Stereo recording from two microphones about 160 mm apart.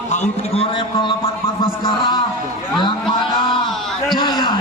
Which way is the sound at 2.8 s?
30° left (ahead or behind).